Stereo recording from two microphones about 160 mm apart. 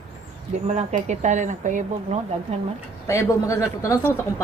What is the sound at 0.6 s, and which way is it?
Speech, 45° right (ahead or behind).